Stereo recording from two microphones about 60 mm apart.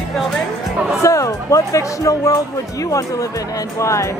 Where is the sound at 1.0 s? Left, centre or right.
Left.